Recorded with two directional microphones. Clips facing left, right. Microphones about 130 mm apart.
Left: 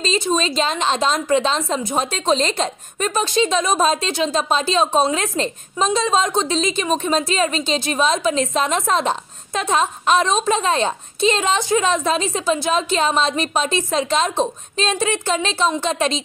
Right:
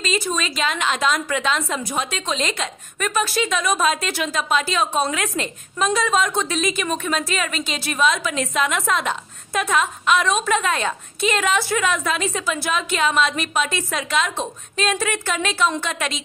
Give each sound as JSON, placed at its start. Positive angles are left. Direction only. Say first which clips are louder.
{"t": 0.0, "sound": "a woman's voice", "louder": "left 4 dB", "side_deg": 30}